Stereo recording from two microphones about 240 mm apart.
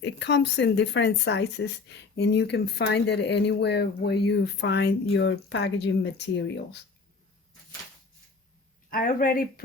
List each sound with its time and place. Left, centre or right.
0.0 s speech: left
8.9 s speech: left